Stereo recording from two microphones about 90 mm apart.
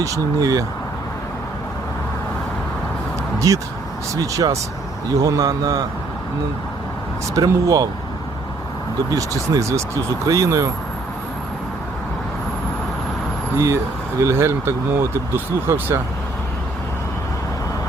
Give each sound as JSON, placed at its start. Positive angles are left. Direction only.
{"t": 0.0, "sound": "speech", "side_deg": -40}
{"t": 3.3, "sound": "a man's voice", "side_deg": -35}
{"t": 7.3, "sound": "speech", "side_deg": -40}
{"t": 9.0, "sound": "speech", "side_deg": -40}
{"t": 14.2, "sound": "speech", "side_deg": -30}